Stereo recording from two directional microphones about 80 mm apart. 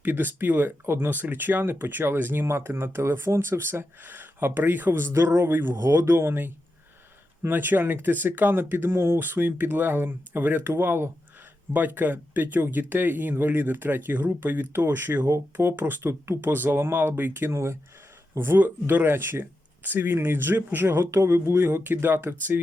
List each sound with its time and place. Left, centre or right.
0.0 s speech: right